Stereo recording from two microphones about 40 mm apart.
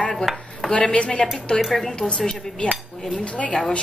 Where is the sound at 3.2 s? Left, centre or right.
Left.